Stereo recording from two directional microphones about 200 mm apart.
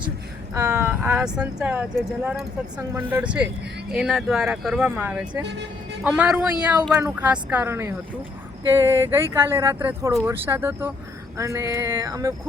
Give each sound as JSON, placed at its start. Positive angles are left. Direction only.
{"t": 0.5, "sound": "speech", "side_deg": -15}